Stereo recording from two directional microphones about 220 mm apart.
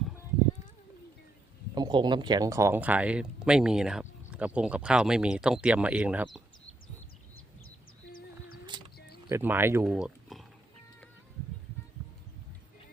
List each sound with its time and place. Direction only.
1.7 s speech: 20° right (ahead or behind)
8.7 s a sound: 20° right (ahead or behind)
9.3 s speech: 10° right (ahead or behind)